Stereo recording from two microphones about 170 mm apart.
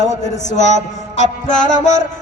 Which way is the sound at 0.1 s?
45° left (ahead or behind).